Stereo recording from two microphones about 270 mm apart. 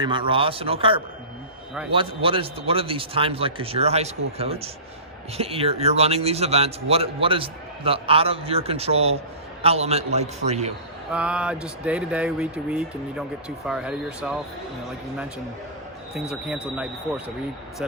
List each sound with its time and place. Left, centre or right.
0.0 s a man's voice: centre
11.1 s speech: centre
16.3 s speech: centre